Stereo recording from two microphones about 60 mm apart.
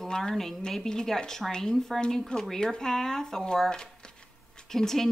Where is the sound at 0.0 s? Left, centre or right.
Centre.